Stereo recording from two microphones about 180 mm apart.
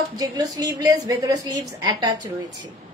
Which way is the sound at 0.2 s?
20° right (ahead or behind).